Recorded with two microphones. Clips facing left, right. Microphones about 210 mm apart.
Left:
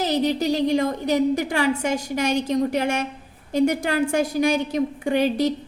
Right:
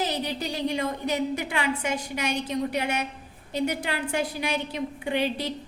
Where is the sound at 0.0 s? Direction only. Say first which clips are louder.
Left 8 dB; 40° left (ahead or behind).